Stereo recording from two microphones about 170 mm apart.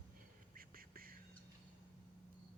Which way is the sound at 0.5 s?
60° right (ahead or behind).